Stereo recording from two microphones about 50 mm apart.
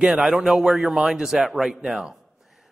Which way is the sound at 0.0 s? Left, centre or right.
Centre.